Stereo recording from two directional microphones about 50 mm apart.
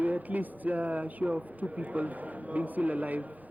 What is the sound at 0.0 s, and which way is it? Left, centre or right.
Speech, right.